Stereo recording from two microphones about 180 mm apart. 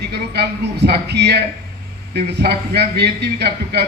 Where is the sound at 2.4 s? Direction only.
65° right (ahead or behind).